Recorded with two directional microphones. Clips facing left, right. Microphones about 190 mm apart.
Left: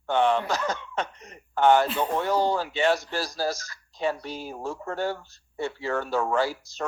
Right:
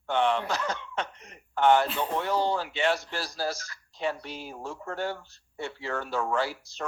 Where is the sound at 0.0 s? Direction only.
45° left (ahead or behind).